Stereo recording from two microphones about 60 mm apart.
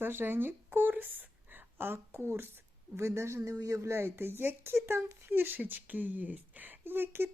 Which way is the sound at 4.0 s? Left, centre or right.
Right.